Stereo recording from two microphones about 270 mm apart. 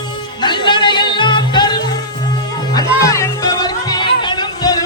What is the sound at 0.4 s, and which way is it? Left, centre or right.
Music, centre.